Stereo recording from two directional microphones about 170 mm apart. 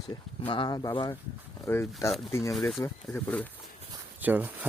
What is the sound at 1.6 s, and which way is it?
Speech, 15° left (ahead or behind).